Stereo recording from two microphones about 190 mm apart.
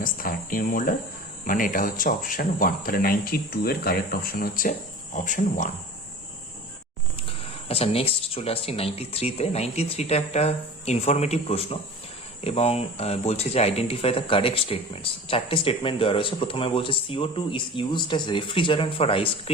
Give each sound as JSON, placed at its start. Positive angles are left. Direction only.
{"t": 0.0, "sound": "speech", "side_deg": 45}
{"t": 7.2, "sound": "speech", "side_deg": 30}